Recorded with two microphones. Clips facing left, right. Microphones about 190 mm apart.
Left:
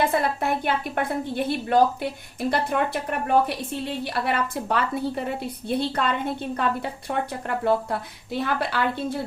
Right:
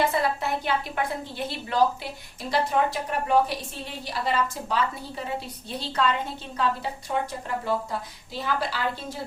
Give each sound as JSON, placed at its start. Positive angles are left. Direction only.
{"t": 0.0, "sound": "a woman's voice", "side_deg": 55}